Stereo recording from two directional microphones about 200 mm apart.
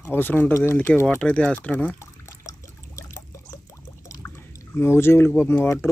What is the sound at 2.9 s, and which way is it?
Trickle, 15° left (ahead or behind).